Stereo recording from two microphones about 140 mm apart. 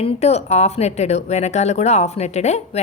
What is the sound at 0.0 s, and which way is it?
A woman's voice, 50° left (ahead or behind).